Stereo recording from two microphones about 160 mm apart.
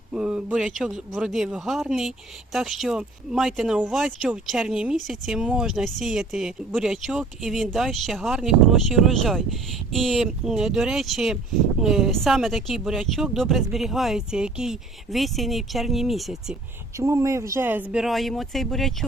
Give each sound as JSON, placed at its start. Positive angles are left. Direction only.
{"t": 0.1, "sound": "a sound", "side_deg": -5}
{"t": 0.8, "sound": "speech", "side_deg": -5}
{"t": 17.0, "sound": "speech", "side_deg": -20}